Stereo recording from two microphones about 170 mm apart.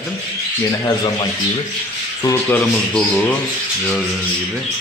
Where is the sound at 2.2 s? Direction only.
10° left (ahead or behind).